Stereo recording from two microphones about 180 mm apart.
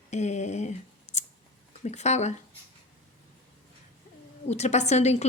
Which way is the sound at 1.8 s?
40° left (ahead or behind).